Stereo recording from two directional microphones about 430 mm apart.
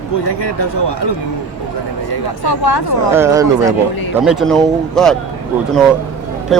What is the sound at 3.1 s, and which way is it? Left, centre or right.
Speech, centre.